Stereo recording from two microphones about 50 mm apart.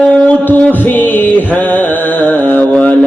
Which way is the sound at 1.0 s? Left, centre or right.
Left.